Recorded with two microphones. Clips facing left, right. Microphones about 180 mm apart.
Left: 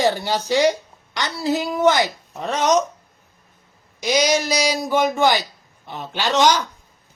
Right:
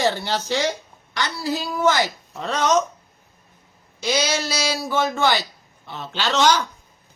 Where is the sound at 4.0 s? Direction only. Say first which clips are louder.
Left 4 dB; 15° left (ahead or behind).